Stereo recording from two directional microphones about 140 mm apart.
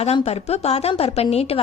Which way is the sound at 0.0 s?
45° left (ahead or behind).